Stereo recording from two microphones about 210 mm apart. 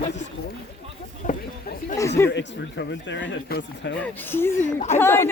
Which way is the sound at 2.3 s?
55° left (ahead or behind).